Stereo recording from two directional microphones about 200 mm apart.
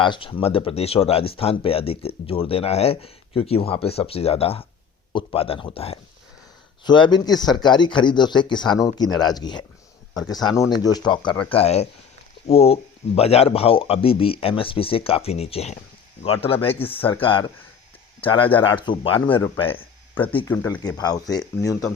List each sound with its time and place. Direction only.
0.0 s speech: 25° left (ahead or behind)
16.8 s speech: 10° left (ahead or behind)
17.1 s speech: 25° left (ahead or behind)
20.5 s speech: 10° left (ahead or behind)